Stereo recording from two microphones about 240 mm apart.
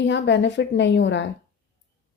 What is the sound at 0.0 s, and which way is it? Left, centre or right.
A woman's voice, left.